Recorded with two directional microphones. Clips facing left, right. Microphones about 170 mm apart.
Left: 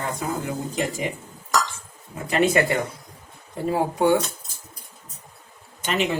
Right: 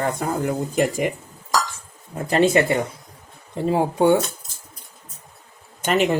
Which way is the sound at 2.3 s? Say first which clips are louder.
Right 3 dB; 30° right (ahead or behind).